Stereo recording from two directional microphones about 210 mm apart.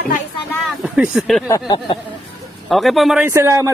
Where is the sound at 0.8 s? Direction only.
5° right (ahead or behind).